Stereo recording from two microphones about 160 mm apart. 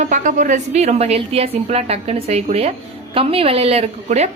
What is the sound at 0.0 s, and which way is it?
A woman's voice, 50° right (ahead or behind).